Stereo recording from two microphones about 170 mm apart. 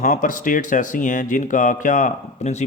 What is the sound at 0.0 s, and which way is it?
Speech, 55° left (ahead or behind).